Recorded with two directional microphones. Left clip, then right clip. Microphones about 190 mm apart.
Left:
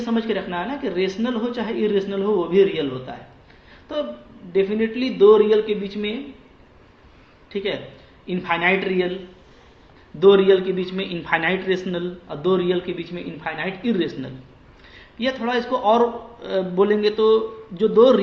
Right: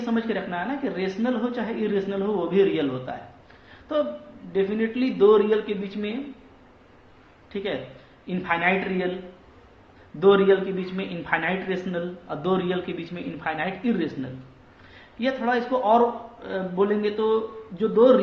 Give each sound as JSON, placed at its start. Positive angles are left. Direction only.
{"t": 0.0, "sound": "speech", "side_deg": 25}
{"t": 4.5, "sound": "speech", "side_deg": 20}
{"t": 7.5, "sound": "speech", "side_deg": 25}
{"t": 10.2, "sound": "speech", "side_deg": 30}
{"t": 12.4, "sound": "speech", "side_deg": 20}
{"t": 15.2, "sound": "a man's voice", "side_deg": 30}